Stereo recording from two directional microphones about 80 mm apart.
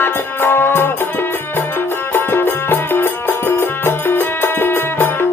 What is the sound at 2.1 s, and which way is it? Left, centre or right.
Music, left.